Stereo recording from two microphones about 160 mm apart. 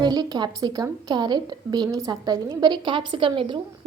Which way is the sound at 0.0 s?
25° right (ahead or behind).